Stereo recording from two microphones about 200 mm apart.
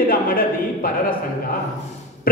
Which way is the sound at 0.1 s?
45° left (ahead or behind).